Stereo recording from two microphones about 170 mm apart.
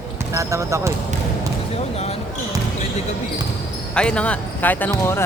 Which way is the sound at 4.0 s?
5° left (ahead or behind).